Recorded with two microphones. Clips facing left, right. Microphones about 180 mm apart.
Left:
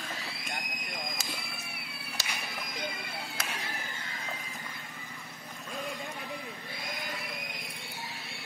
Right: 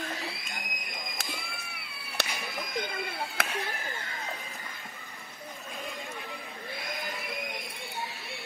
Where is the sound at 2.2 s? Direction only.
60° right (ahead or behind).